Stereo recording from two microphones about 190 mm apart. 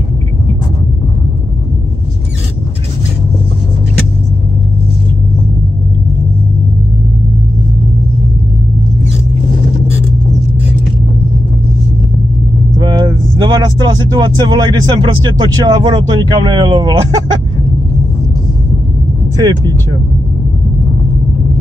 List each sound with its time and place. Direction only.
12.7 s speech: 20° right (ahead or behind)
19.3 s speech: 20° right (ahead or behind)